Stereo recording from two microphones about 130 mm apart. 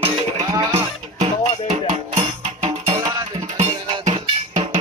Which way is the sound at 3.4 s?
60° right (ahead or behind).